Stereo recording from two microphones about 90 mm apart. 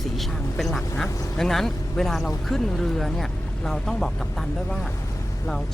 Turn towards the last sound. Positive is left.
turn(degrees=5)  # may be behind; listen again after turning